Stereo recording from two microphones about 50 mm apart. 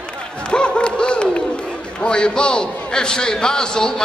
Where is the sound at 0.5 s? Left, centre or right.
Left.